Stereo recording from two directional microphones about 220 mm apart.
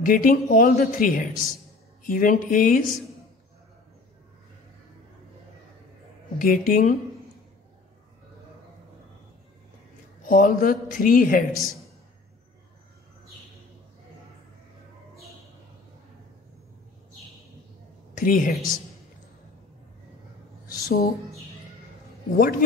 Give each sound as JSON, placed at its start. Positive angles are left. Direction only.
{"t": 0.0, "sound": "speech", "side_deg": 40}
{"t": 6.3, "sound": "speech", "side_deg": 40}
{"t": 10.2, "sound": "speech", "side_deg": 40}
{"t": 18.1, "sound": "a woman's voice", "side_deg": 40}
{"t": 20.6, "sound": "a sound", "side_deg": 40}
{"t": 22.3, "sound": "speech", "side_deg": 40}